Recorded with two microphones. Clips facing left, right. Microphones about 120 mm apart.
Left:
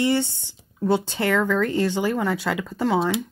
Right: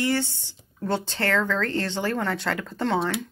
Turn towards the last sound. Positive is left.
turn(degrees=5)  # may be behind; listen again after turning